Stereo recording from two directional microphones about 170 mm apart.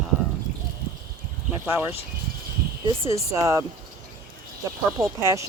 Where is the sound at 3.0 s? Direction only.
15° right (ahead or behind).